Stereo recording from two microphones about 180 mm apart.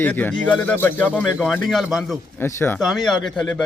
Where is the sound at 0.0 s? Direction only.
10° left (ahead or behind).